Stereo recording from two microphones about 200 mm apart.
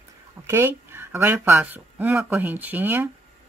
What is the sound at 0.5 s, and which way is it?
Speech, 10° right (ahead or behind).